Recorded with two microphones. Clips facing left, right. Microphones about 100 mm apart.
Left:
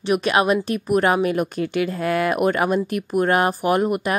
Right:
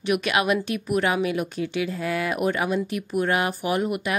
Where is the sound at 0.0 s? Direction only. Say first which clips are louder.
Left 4 dB; 35° left (ahead or behind).